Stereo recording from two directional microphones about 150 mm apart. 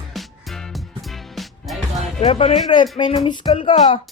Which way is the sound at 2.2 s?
40° left (ahead or behind).